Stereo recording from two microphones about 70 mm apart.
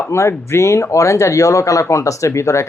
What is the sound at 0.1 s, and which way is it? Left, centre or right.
Speech, left.